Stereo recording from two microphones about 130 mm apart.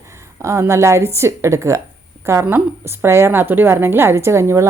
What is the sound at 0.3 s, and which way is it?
A woman's voice, 20° right (ahead or behind).